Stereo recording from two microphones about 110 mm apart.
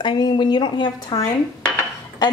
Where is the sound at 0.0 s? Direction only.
45° left (ahead or behind).